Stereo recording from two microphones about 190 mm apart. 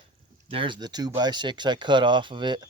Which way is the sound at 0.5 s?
25° right (ahead or behind).